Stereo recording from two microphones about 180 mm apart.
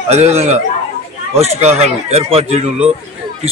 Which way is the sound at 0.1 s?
35° right (ahead or behind).